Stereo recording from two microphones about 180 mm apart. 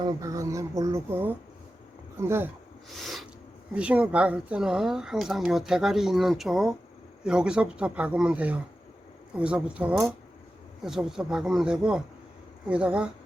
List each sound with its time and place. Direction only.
0.0 s speech: 20° right (ahead or behind)
3.0 s sneeze: centre (ahead or behind)
3.8 s speech: 5° right (ahead or behind)